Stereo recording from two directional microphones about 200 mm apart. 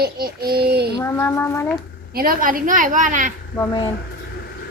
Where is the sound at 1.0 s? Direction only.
10° left (ahead or behind).